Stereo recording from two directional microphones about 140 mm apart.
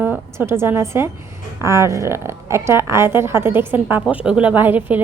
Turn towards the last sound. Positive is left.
turn(degrees=-15)  # may be behind; listen again after turning